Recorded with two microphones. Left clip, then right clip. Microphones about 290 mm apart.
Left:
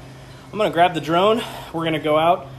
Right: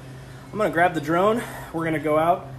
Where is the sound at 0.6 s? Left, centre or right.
Centre.